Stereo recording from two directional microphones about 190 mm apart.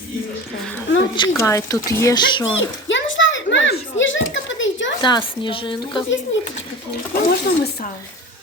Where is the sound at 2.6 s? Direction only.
80° left.